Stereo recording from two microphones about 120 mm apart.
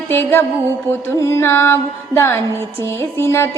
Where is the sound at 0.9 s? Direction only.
25° right (ahead or behind).